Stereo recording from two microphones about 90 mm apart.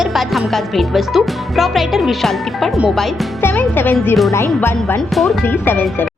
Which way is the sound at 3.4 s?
20° left (ahead or behind).